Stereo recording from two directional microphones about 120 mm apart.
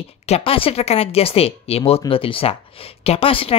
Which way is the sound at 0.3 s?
50° left (ahead or behind).